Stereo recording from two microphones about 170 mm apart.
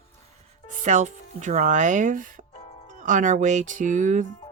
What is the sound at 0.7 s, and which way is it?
Speech, 45° right (ahead or behind).